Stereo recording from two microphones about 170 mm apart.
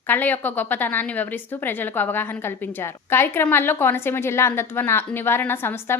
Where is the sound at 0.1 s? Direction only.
10° left (ahead or behind).